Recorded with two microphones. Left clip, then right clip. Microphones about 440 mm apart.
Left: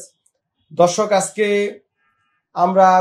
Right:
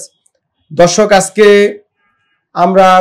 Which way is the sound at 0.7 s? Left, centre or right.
Right.